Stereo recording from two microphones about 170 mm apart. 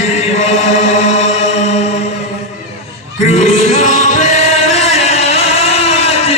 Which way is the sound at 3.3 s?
40° left (ahead or behind).